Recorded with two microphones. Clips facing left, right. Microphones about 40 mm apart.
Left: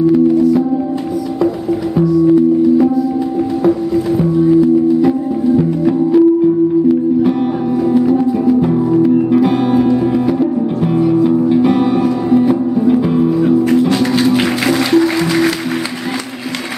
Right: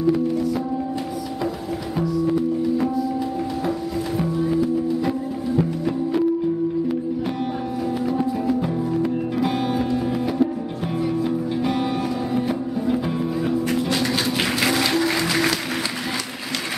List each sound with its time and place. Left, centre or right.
0.0 s music: centre
2.0 s music: centre
7.8 s music: centre
8.6 s music: centre